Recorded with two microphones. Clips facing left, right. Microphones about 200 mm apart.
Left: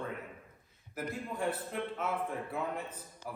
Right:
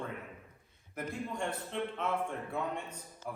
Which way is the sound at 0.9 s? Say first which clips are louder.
Even; 5° left (ahead or behind).